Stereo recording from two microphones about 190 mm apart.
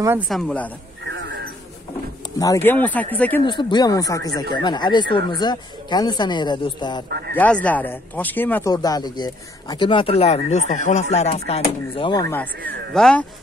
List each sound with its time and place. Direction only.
0.3 s speech: 5° left (ahead or behind)
2.3 s speech: 15° left (ahead or behind)
3.4 s speech: 25° left (ahead or behind)
7.1 s speech: 55° right (ahead or behind)
7.3 s speech: 5° left (ahead or behind)
8.7 s speech: 20° left (ahead or behind); by 13.2 s 5° left (ahead or behind)